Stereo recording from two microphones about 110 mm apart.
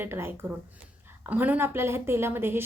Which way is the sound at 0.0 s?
20° right (ahead or behind).